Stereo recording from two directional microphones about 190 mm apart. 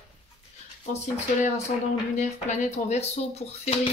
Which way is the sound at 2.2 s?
40° left (ahead or behind).